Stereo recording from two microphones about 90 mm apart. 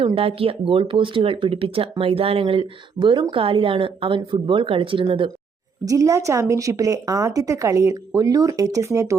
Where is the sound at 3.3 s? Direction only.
90° right; by 5.2 s 75° right (ahead or behind).